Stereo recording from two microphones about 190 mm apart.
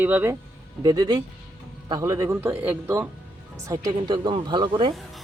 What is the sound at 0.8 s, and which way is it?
Speech, 20° right (ahead or behind).